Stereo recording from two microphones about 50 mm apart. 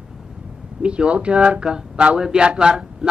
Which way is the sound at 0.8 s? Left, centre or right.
Right.